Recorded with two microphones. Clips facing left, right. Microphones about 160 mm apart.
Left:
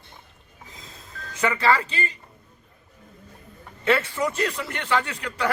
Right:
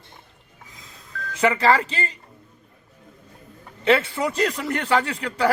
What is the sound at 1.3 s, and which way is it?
Speech, 30° right (ahead or behind).